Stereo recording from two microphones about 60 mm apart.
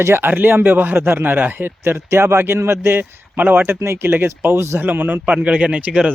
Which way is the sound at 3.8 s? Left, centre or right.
Right.